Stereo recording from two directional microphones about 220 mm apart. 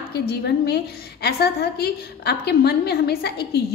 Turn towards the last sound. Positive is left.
turn(degrees=45)  # may be behind; listen again after turning